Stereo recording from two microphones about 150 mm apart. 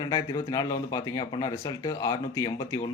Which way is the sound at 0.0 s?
25° left (ahead or behind).